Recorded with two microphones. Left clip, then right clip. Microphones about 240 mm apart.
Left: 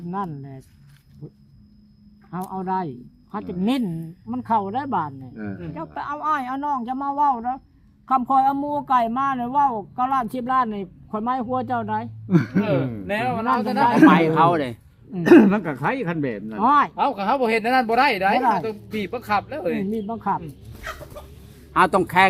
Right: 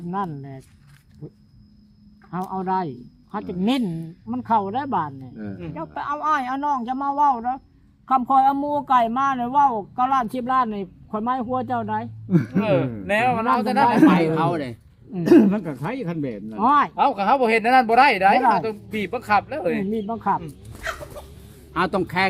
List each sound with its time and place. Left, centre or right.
0.1 s speech: centre
5.3 s speech: left
5.7 s speech: centre
6.2 s speech: centre
6.8 s speech: centre
12.3 s speech: left
12.5 s speech: right
14.0 s speech: left
16.6 s speech: centre
21.7 s speech: left